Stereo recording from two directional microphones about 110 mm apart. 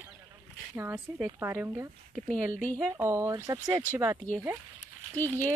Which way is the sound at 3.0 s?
25° right (ahead or behind).